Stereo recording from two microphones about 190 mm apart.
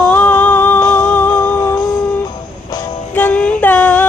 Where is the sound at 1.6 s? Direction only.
20° left (ahead or behind).